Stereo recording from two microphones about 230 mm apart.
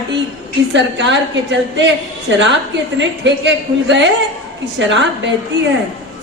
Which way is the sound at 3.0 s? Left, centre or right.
Right.